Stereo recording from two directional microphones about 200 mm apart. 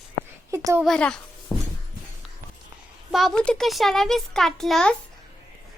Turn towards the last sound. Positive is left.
turn(degrees=5)  # may be behind; listen again after turning